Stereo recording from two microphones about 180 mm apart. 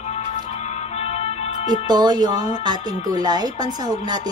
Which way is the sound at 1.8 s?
20° right (ahead or behind).